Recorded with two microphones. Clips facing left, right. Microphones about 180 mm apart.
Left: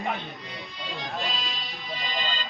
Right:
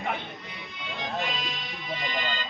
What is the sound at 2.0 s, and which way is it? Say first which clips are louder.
Music: even; 55° right (ahead or behind).